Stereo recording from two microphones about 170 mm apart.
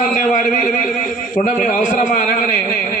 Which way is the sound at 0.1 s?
50° left (ahead or behind).